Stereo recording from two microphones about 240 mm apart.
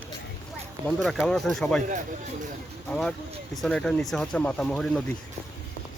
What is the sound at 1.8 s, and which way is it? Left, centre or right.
Speech, right.